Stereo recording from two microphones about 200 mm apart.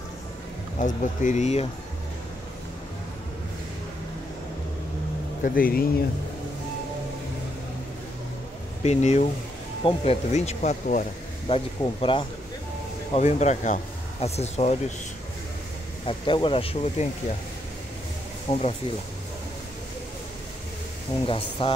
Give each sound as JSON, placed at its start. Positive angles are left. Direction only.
{"t": 0.7, "sound": "speech", "side_deg": 40}
{"t": 5.4, "sound": "speech", "side_deg": 45}
{"t": 8.8, "sound": "speech", "side_deg": 35}
{"t": 11.4, "sound": "speech", "side_deg": 25}
{"t": 16.1, "sound": "speech", "side_deg": 25}
{"t": 18.5, "sound": "speech", "side_deg": 30}
{"t": 21.3, "sound": "speech", "side_deg": 25}